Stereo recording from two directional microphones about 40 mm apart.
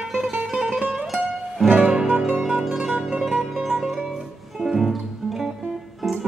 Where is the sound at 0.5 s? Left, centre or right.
Right.